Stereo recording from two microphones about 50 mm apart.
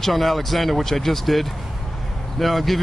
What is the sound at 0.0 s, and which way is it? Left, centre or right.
Speech, centre.